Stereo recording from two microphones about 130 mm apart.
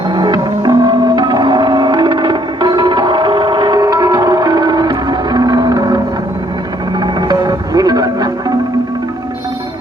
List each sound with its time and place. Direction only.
0.1 s music: 30° right (ahead or behind)
7.0 s music: 30° right (ahead or behind)